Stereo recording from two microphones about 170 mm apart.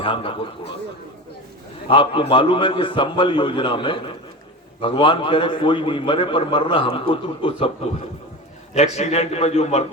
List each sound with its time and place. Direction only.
0.0 s a man's voice: 30° left (ahead or behind)
1.9 s a man's voice: 30° left (ahead or behind)
8.7 s a man's voice: 40° left (ahead or behind)